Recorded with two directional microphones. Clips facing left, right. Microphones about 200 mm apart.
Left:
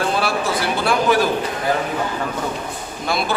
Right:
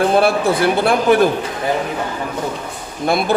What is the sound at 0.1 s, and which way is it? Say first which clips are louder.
A man's voice: right 6 dB; 55° right (ahead or behind).